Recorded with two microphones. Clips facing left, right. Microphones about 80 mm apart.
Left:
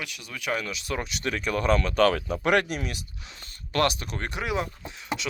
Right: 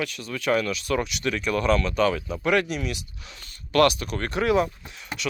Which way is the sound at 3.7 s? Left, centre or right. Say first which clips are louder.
Right 5 dB; left.